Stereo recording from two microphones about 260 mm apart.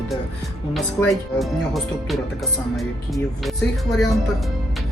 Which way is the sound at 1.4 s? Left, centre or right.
Centre.